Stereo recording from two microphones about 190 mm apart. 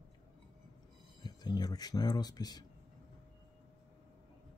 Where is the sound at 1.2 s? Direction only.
20° left (ahead or behind).